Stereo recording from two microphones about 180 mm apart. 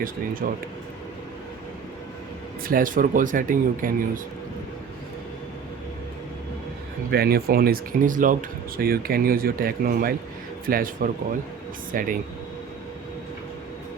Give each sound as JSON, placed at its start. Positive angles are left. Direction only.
{"t": 0.4, "sound": "speech", "side_deg": -50}
{"t": 2.6, "sound": "speech", "side_deg": -50}
{"t": 7.1, "sound": "speech", "side_deg": -60}